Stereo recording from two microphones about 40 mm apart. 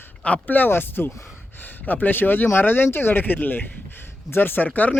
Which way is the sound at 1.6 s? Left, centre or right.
Left.